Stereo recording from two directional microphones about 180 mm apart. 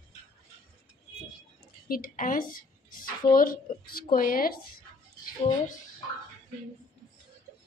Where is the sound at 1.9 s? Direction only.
50° left (ahead or behind).